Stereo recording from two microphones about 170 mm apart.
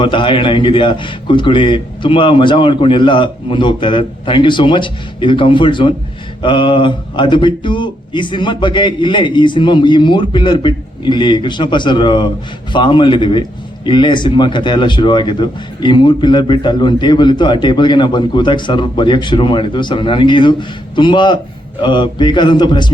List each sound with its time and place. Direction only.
0.0 s speech: 30° left (ahead or behind)